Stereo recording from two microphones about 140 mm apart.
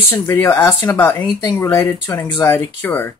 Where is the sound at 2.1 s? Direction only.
25° left (ahead or behind).